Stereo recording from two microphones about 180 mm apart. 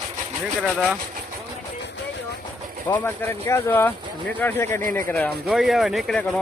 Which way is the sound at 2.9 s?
15° left (ahead or behind).